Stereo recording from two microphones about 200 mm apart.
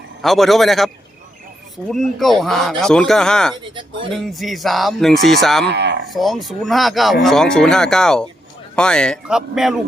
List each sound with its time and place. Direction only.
0.2 s speech: centre (ahead or behind)
1.9 s speech: centre (ahead or behind)
5.6 s speech: 60° right (ahead or behind)
6.1 s speech: centre (ahead or behind)